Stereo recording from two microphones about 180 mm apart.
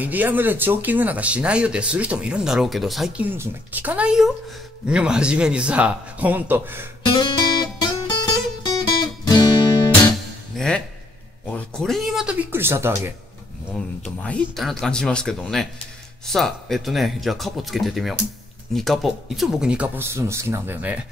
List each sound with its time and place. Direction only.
0.0 s speech: 10° right (ahead or behind)
7.1 s guitar: 25° left (ahead or behind)
8.6 s music: 25° left (ahead or behind)
10.5 s music: centre (ahead or behind)
11.4 s speech: 5° left (ahead or behind); by 13.1 s 15° right (ahead or behind)
13.7 s speech: 5° left (ahead or behind); by 21.0 s 10° right (ahead or behind)